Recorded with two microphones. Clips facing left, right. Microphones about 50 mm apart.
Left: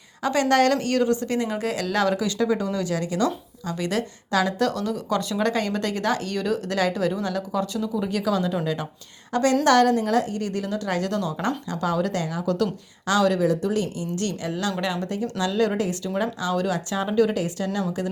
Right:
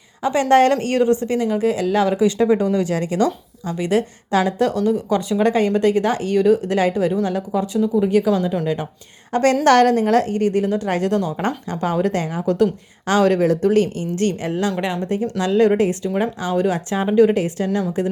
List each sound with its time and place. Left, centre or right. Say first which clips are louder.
0.2 s a woman's voice: right 5 dB; centre
1.4 s speech: right 7 dB; centre
2.2 s a woman's voice: right 7 dB; right
3.7 s a woman's voice: right 6 dB; right
9.3 s a woman's voice: right 4 dB; right